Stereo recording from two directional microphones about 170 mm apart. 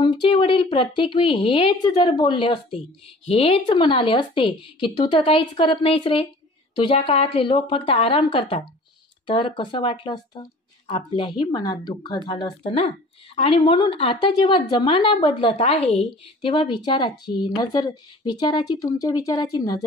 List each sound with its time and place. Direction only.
0.2 s a woman's voice: 30° left (ahead or behind)